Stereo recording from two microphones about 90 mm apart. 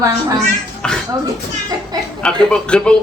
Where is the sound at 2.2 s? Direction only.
10° left (ahead or behind).